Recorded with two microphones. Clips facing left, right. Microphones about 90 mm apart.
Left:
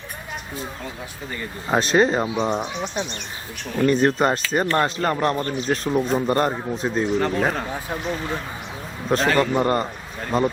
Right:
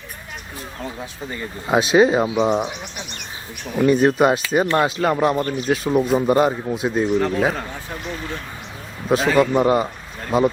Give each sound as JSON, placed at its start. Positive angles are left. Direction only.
{"t": 1.3, "sound": "speech", "side_deg": -15}
{"t": 1.7, "sound": "speech", "side_deg": -5}
{"t": 3.7, "sound": "speech", "side_deg": -10}
{"t": 9.0, "sound": "speech", "side_deg": -5}